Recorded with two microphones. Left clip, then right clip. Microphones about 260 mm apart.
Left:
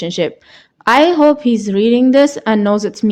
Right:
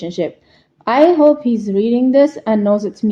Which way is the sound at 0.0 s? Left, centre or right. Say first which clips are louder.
Left 3 dB; left.